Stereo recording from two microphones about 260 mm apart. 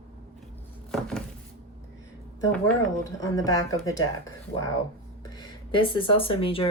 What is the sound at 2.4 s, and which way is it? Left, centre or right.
Speech, centre.